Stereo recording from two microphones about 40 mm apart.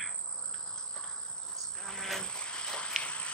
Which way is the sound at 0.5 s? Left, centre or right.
Centre.